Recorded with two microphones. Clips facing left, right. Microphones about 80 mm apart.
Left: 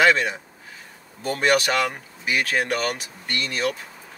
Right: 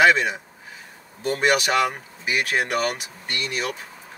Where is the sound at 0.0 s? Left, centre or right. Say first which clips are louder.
Right 1 dB; centre.